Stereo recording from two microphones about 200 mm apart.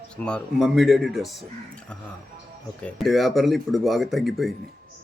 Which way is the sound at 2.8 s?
Centre (ahead or behind).